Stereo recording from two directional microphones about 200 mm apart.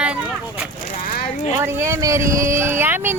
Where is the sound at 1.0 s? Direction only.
45° left (ahead or behind).